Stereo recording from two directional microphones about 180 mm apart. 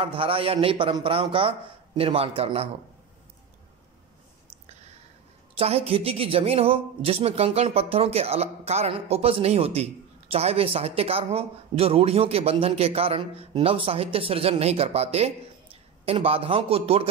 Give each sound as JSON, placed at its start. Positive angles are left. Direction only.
{"t": 0.0, "sound": "a woman's voice", "side_deg": -30}
{"t": 5.6, "sound": "a woman's voice", "side_deg": -35}